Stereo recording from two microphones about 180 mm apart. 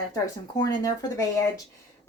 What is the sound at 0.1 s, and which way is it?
A woman's voice, 20° left (ahead or behind).